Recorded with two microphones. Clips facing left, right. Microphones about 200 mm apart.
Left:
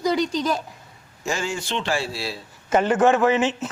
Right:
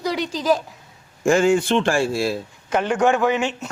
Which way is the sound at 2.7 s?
5° left (ahead or behind).